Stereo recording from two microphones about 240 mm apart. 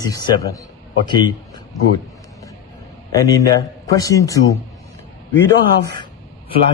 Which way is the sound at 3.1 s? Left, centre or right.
Centre.